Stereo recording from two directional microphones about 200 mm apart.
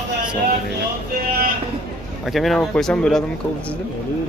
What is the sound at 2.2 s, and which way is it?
Speech, centre (ahead or behind).